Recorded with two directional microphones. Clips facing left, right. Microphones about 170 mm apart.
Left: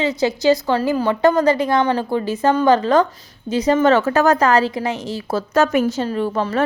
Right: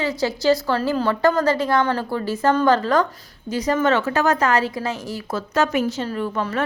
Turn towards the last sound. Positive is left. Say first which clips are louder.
# left 4 dB
turn(degrees=30)  # may be behind; listen again after turning